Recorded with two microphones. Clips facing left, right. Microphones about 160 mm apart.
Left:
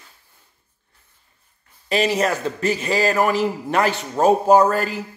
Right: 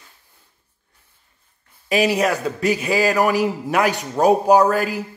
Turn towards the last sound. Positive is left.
turn(degrees=-10)  # may be behind; listen again after turning